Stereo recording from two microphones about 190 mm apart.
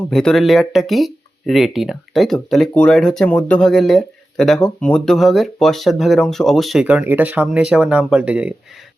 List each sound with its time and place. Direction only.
0.1 s speech: 5° left (ahead or behind)